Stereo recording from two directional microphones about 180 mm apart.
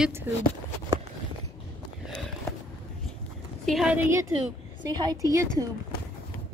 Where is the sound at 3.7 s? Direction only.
Centre (ahead or behind).